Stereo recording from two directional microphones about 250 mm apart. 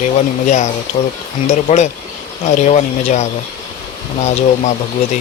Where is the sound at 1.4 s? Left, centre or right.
Left.